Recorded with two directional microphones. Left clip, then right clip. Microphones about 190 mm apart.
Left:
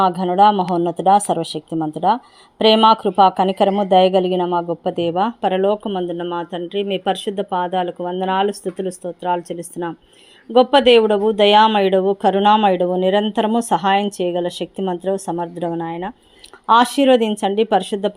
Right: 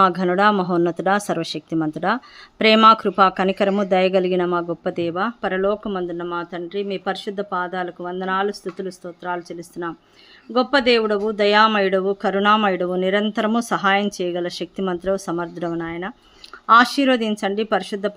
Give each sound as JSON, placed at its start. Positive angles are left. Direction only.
{"t": 0.0, "sound": "speech", "side_deg": -5}
{"t": 0.6, "sound": "speech", "side_deg": -35}
{"t": 0.9, "sound": "speech", "side_deg": -5}